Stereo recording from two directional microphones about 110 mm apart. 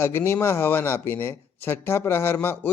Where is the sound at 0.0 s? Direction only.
20° left (ahead or behind).